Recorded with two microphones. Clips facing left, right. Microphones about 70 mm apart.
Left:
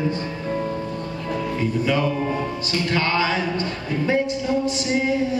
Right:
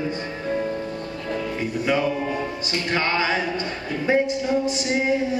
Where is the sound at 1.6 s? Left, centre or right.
Centre.